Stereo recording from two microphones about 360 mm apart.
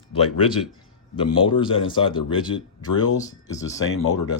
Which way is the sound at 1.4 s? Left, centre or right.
Centre.